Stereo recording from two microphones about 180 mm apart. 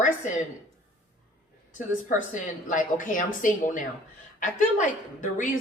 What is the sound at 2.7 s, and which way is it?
A woman's voice, 45° left (ahead or behind).